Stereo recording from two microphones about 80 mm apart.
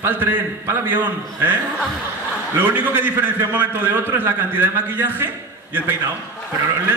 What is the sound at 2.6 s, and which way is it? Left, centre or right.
A man's voice, right.